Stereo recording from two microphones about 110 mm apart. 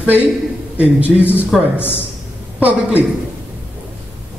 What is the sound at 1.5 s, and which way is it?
Speech, centre (ahead or behind).